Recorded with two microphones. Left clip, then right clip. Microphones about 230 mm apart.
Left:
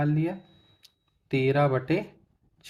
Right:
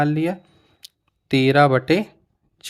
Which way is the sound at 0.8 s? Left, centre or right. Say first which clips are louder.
Right 15 dB; right.